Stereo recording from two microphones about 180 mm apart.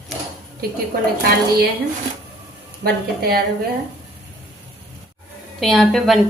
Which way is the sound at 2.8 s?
55° right (ahead or behind).